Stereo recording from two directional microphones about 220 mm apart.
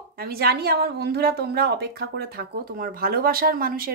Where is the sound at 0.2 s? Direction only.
45° right (ahead or behind).